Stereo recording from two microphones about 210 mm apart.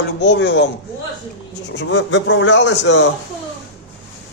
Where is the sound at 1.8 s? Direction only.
60° left (ahead or behind).